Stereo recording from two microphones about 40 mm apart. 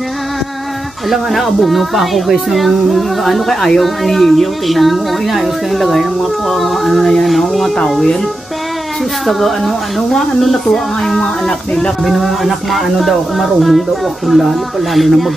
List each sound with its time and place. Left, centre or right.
1.3 s a child's voice: centre
9.2 s a child's voice: centre
11.1 s speech: centre
12.0 s a child's voice: centre